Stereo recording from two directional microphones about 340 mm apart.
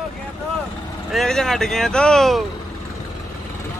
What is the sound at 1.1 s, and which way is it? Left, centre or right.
Speech, centre.